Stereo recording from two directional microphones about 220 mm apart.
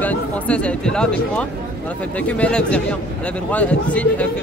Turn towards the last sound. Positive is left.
turn(degrees=5)  # may be behind; listen again after turning